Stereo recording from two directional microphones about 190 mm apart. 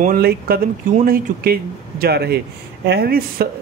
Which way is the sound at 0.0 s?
50° right (ahead or behind).